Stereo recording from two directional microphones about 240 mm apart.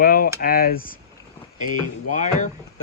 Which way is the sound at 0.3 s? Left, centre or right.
Left.